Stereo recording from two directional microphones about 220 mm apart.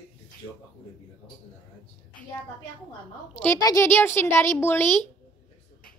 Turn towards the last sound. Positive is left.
turn(degrees=10)  # may be behind; listen again after turning